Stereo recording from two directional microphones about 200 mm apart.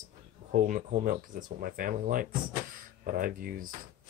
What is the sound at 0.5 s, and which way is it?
Speech, 40° right (ahead or behind).